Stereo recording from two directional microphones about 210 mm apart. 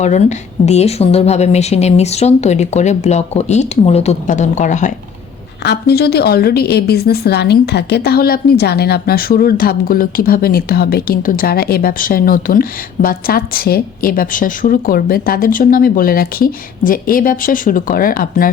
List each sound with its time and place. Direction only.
0.0 s a woman's voice: 35° left (ahead or behind)
5.6 s a woman's voice: 50° left (ahead or behind)